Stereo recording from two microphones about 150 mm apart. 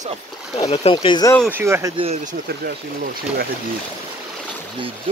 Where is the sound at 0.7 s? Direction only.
40° left (ahead or behind).